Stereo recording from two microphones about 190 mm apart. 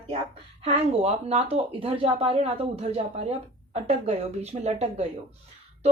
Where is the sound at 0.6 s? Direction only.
35° right (ahead or behind).